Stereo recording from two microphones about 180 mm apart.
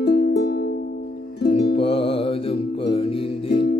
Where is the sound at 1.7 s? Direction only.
30° left (ahead or behind).